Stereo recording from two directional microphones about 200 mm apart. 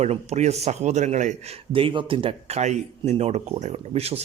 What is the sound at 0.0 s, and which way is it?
Speech, 35° right (ahead or behind).